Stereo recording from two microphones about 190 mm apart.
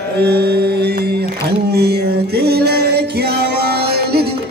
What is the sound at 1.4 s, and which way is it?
Music, 55° right (ahead or behind).